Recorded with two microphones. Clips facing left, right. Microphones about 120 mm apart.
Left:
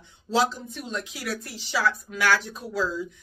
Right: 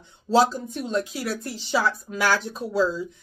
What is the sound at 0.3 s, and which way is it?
Speech, 40° right (ahead or behind).